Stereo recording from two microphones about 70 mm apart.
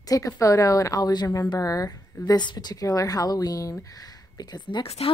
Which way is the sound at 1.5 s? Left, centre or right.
Left.